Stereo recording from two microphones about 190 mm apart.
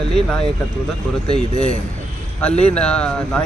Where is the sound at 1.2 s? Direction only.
35° left (ahead or behind).